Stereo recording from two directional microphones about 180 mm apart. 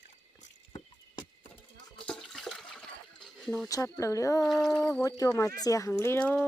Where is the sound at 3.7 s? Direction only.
15° left (ahead or behind).